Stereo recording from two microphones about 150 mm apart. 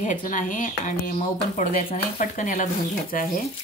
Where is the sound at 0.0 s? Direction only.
60° left (ahead or behind).